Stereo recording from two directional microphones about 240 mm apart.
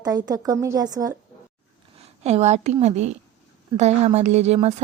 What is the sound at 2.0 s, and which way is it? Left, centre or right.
A woman's voice, right.